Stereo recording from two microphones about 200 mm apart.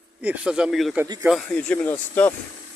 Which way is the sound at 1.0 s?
15° right (ahead or behind).